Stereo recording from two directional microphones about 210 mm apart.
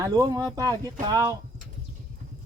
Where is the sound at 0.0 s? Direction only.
15° right (ahead or behind).